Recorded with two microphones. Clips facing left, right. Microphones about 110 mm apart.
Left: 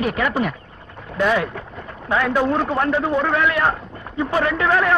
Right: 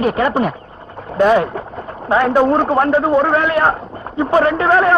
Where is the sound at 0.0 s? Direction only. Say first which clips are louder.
Right 5 dB; 35° right (ahead or behind).